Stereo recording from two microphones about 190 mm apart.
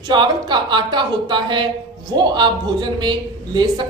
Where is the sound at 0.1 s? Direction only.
25° right (ahead or behind).